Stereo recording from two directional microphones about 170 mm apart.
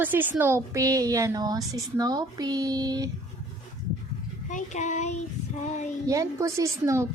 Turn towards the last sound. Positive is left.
turn(degrees=-15)  # may be behind; listen again after turning